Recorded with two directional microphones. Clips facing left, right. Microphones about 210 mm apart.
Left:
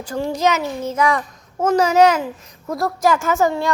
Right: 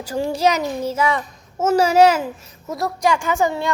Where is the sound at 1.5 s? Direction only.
10° right (ahead or behind).